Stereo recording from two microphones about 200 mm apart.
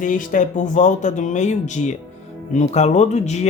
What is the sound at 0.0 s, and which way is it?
Speech, 40° left (ahead or behind).